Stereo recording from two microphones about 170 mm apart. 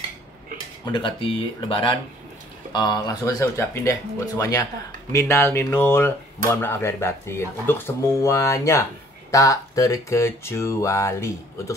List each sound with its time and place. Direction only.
0.9 s speech: 30° left (ahead or behind)